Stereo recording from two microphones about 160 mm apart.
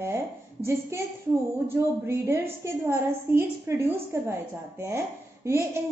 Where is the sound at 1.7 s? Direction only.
15° right (ahead or behind).